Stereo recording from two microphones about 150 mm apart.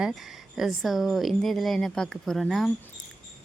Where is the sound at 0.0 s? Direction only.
Centre (ahead or behind).